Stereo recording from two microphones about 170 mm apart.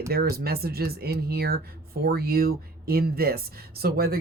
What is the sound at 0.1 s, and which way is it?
Speech, 65° right (ahead or behind).